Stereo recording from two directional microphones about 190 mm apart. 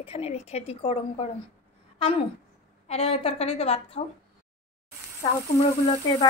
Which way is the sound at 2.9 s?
35° left (ahead or behind).